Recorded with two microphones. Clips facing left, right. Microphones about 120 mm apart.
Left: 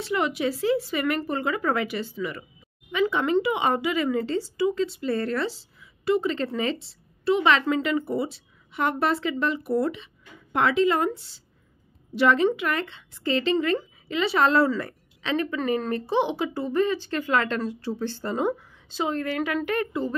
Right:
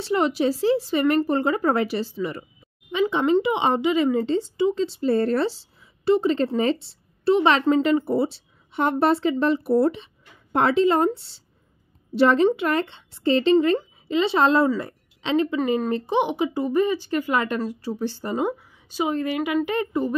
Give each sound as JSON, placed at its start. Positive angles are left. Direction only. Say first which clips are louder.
{"t": 0.0, "sound": "a woman's voice", "louder": "right 4 dB", "side_deg": -30}